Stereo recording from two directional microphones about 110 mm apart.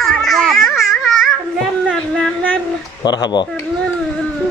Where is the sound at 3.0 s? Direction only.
40° left (ahead or behind).